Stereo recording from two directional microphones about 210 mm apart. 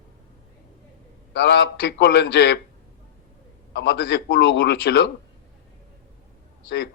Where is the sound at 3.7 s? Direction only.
55° left (ahead or behind).